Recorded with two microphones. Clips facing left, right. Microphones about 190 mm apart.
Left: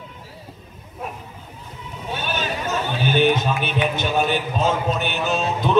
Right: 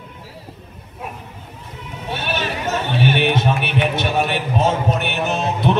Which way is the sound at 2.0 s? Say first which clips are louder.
Right 2 dB; 70° right (ahead or behind).